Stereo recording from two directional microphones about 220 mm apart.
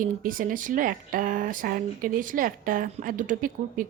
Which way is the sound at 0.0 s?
40° right (ahead or behind).